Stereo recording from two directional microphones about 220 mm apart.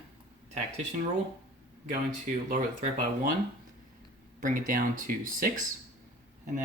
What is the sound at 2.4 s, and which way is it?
Speech, 40° right (ahead or behind).